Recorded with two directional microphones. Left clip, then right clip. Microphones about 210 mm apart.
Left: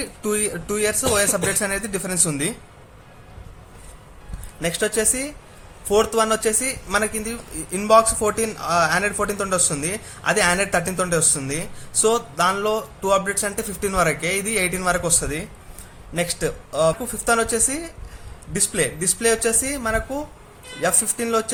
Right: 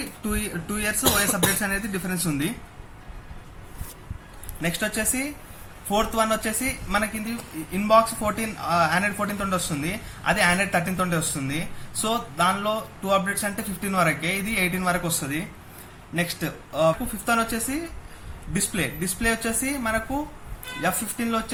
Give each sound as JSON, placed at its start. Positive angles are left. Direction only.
{"t": 0.2, "sound": "speech", "side_deg": 55}
{"t": 4.6, "sound": "speech", "side_deg": 50}